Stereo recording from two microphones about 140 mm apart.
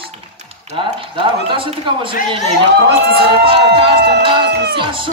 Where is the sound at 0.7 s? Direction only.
40° right (ahead or behind).